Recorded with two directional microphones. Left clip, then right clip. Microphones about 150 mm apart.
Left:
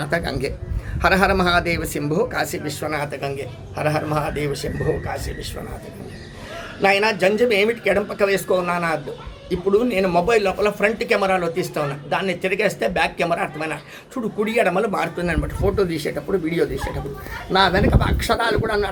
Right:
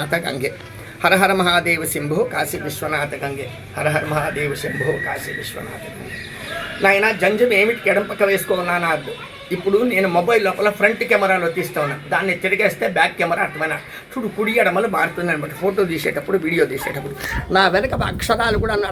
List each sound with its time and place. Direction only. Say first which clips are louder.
0.0 s speech: right 2 dB; 20° left (ahead or behind)
6.8 s speech: right 2 dB; 25° left (ahead or behind)
17.5 s speech: right 1 dB; 5° left (ahead or behind)